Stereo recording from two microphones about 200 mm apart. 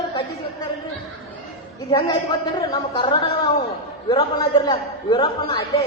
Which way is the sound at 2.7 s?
25° left (ahead or behind).